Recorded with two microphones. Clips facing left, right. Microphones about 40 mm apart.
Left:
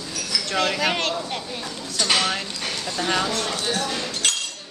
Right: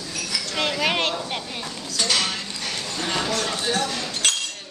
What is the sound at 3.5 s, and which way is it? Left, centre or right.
Speech, centre.